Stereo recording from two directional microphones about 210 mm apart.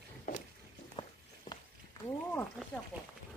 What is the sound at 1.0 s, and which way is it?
Walk, 25° left (ahead or behind).